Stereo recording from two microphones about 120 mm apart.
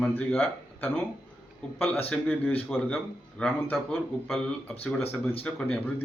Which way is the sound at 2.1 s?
15° left (ahead or behind).